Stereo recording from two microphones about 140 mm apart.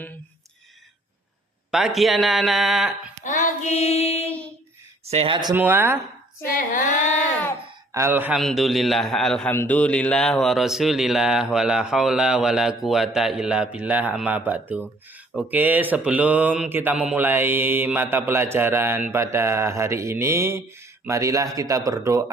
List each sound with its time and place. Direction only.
1.7 s speech: centre (ahead or behind)
3.2 s child singing: 60° left (ahead or behind)
5.0 s speech: 45° right (ahead or behind)
5.5 s mantra: 15° right (ahead or behind)
6.4 s child singing: 90° left; by 7.2 s 60° left (ahead or behind)
7.9 s mantra: 15° right (ahead or behind)
8.4 s speech: centre (ahead or behind)
9.5 s speech: 15° left (ahead or behind); by 14.8 s 10° right (ahead or behind)
15.3 s mantra: 10° right (ahead or behind)
21.0 s speech: 20° right (ahead or behind)